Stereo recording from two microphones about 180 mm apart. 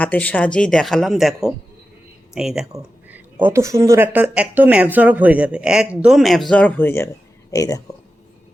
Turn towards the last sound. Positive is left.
turn(degrees=20)  # may be behind; listen again after turning